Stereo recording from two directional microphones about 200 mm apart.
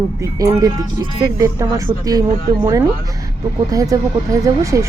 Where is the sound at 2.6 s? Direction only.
15° right (ahead or behind).